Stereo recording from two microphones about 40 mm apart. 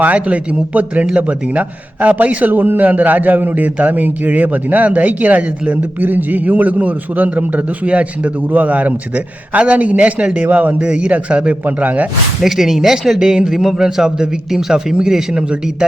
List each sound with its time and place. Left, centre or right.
0.0 s speech: right
2.5 s a man's voice: right
10.4 s a man's voice: right
10.8 s a man's voice: right
12.4 s a man's voice: centre
13.1 s a man's voice: centre